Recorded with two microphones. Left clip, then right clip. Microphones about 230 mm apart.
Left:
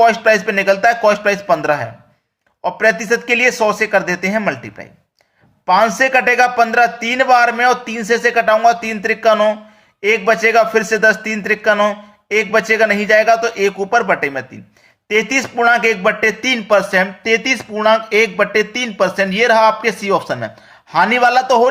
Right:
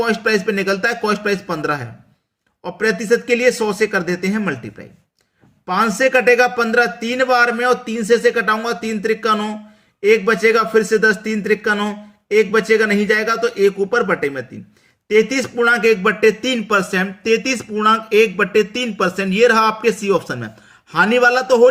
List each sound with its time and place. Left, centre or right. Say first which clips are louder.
0.0 s a man's voice: left 6 dB; centre